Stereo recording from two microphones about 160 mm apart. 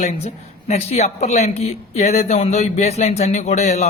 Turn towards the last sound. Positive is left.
turn(degrees=45)  # may be behind; listen again after turning